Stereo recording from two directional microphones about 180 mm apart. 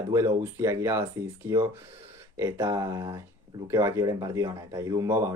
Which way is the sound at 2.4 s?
15° right (ahead or behind).